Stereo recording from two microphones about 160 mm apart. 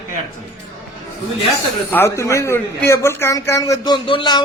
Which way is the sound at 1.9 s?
15° left (ahead or behind).